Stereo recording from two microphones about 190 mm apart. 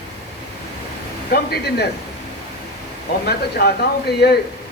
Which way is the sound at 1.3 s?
55° left (ahead or behind).